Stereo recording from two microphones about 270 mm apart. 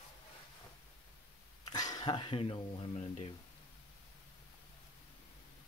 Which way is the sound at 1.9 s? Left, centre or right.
Centre.